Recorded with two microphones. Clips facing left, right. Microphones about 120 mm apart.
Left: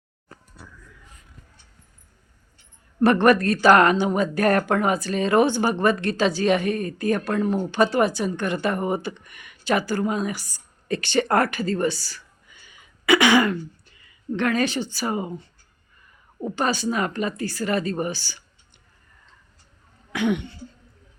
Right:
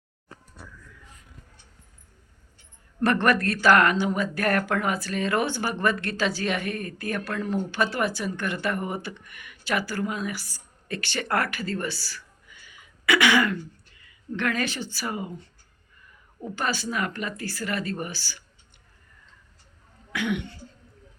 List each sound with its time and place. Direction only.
3.0 s speech: 15° left (ahead or behind)
16.4 s speech: 25° left (ahead or behind)
20.1 s speech: 20° left (ahead or behind)